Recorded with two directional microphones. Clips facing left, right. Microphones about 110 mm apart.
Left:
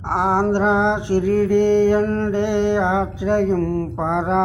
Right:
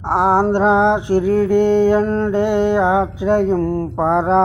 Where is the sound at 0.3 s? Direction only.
35° right (ahead or behind).